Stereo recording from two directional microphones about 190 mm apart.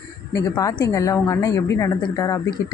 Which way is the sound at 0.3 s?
20° left (ahead or behind).